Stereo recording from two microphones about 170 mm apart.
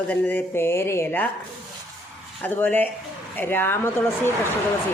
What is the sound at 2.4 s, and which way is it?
Speech, 10° left (ahead or behind).